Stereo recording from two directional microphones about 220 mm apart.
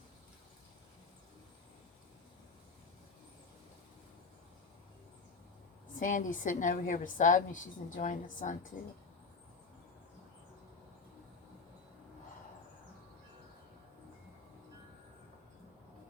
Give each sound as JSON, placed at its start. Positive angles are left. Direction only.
{"t": 6.0, "sound": "a woman's voice", "side_deg": 35}